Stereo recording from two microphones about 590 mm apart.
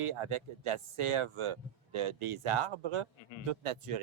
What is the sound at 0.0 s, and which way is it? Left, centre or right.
Speech, right.